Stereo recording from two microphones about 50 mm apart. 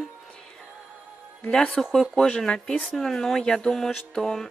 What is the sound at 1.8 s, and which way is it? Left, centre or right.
Speech, centre.